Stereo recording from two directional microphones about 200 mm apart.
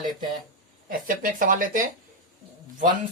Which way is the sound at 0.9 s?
45° right (ahead or behind).